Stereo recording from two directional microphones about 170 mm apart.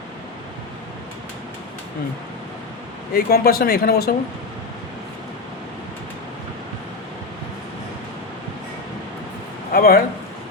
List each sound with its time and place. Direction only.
3.1 s speech: 65° left (ahead or behind)
9.7 s a man's voice: 60° left (ahead or behind)